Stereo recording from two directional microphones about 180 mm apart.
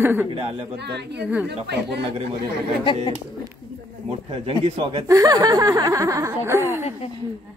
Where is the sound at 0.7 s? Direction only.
70° right (ahead or behind).